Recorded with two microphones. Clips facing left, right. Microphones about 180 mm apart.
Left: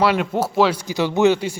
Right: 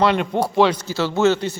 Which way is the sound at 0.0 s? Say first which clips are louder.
Even; 5° left (ahead or behind).